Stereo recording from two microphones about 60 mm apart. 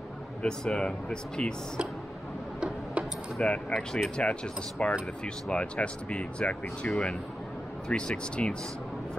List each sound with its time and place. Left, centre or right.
0.4 s speech: centre
2.6 s tick-tock: centre
3.3 s speech: centre
7.9 s speech: centre